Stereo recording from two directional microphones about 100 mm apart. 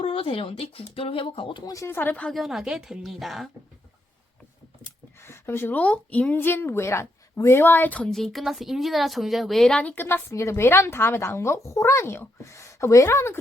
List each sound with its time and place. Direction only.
0.0 s speech: 70° left (ahead or behind)
1.6 s speech: 30° left (ahead or behind)
2.2 s speech: centre (ahead or behind)
5.2 s speech: 25° left (ahead or behind)
8.1 s speech: centre (ahead or behind); by 13.4 s 25° left (ahead or behind)